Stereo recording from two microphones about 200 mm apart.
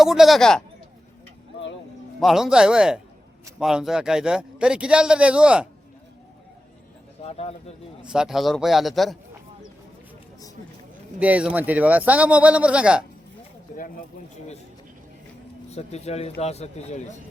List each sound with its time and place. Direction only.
0.0 s a man's voice: centre (ahead or behind)
2.2 s a man's voice: centre (ahead or behind)
7.3 s speech: 30° left (ahead or behind)
8.0 s a man's voice: 5° right (ahead or behind)
11.2 s speech: 5° right (ahead or behind)
13.7 s speech: 40° left (ahead or behind)
15.7 s speech: 30° left (ahead or behind)